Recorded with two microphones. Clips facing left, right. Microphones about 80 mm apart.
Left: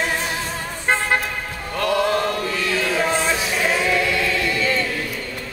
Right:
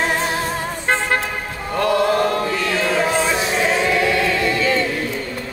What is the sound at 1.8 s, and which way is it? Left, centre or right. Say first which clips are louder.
Chant: right 3 dB; right.